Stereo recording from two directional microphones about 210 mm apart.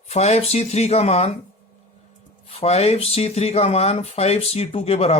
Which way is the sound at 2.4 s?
30° left (ahead or behind).